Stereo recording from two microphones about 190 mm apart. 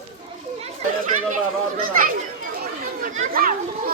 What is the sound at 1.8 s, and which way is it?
A child's voice, 45° right (ahead or behind).